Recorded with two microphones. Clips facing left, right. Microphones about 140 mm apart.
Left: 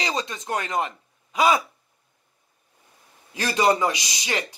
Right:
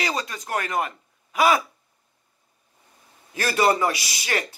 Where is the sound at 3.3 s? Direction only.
20° left (ahead or behind).